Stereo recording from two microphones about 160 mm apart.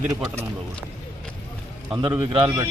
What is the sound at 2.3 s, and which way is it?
Speech, 30° right (ahead or behind).